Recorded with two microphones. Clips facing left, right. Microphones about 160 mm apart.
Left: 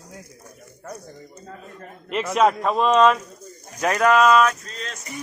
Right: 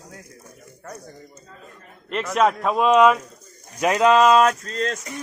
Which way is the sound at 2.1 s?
Centre (ahead or behind).